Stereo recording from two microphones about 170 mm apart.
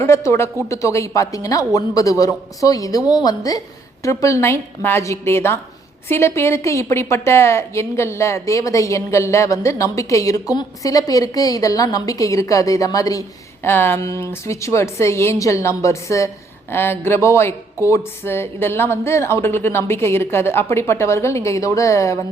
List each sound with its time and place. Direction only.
0.0 s a woman's voice: 15° left (ahead or behind)